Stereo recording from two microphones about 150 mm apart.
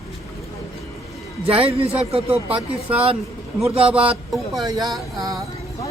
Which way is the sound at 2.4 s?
10° right (ahead or behind).